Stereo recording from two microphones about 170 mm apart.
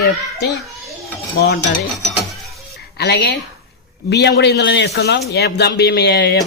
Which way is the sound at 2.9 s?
75° left (ahead or behind).